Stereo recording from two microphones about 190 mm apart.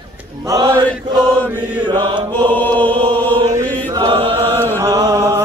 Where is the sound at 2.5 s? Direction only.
10° left (ahead or behind).